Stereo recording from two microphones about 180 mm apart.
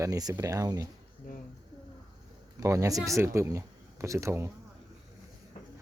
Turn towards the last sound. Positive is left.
turn(degrees=-15)  # may be behind; listen again after turning